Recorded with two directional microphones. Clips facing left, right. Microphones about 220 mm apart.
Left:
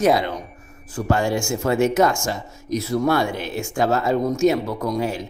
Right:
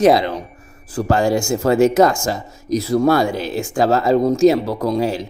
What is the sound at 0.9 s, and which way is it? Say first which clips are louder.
Speech: right 4 dB; 40° right (ahead or behind).